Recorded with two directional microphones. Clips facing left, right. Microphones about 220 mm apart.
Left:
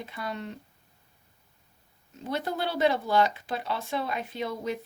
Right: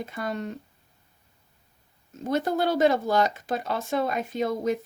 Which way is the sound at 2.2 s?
45° right (ahead or behind).